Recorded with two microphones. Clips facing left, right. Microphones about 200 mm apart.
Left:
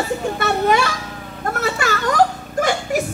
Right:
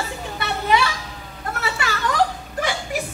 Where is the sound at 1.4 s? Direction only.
45° left (ahead or behind).